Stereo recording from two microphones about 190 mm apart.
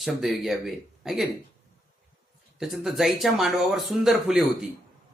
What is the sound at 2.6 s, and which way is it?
Speech, centre (ahead or behind).